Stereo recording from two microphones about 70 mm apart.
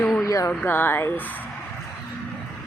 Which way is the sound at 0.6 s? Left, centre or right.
Left.